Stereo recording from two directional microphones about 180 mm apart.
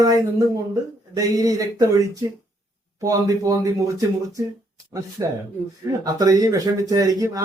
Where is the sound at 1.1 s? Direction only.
20° right (ahead or behind).